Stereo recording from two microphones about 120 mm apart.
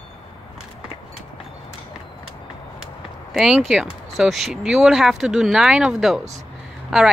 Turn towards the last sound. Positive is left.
turn(degrees=-5)  # may be behind; listen again after turning